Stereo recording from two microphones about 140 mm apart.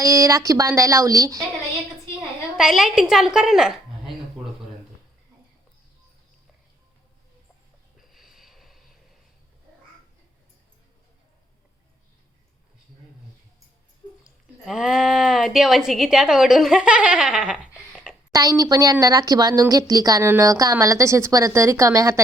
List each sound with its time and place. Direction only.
0.0 s speech: 20° right (ahead or behind)
2.1 s a woman's voice: 5° right (ahead or behind)
7.9 s a sound: centre (ahead or behind)
14.3 s speech: 5° right (ahead or behind)
18.3 s speech: 25° right (ahead or behind)